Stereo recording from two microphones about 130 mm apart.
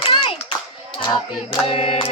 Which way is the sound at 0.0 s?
45° left (ahead or behind).